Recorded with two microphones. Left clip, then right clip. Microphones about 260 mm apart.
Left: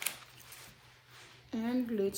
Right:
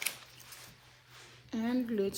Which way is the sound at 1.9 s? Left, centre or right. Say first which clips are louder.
Left 1 dB; right.